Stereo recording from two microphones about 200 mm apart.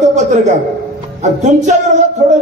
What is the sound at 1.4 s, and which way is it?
Speech, 35° right (ahead or behind).